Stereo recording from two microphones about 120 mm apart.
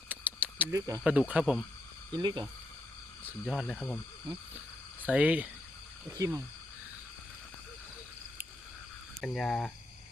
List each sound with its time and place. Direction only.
0.1 s a sound: 15° right (ahead or behind)
0.7 s speech: 30° right (ahead or behind)
1.3 s cricket: 10° right (ahead or behind)
2.1 s speech: 35° right (ahead or behind)
3.4 s speech: centre (ahead or behind)
3.8 s speech: 10° left (ahead or behind)
5.0 s cricket: 10° right (ahead or behind)
6.1 s speech: 25° right (ahead or behind)
9.2 s speech: centre (ahead or behind)